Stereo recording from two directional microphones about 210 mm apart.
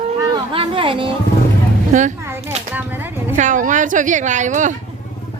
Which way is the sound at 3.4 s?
35° right (ahead or behind).